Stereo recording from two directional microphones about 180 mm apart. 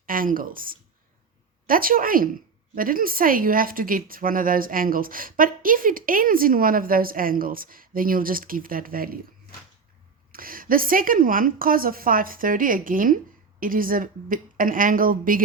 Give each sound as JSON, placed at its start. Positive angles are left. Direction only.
{"t": 0.0, "sound": "a woman's voice", "side_deg": -50}
{"t": 10.3, "sound": "a woman's voice", "side_deg": -50}